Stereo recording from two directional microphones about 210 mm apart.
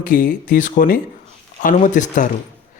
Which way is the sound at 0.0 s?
40° left (ahead or behind).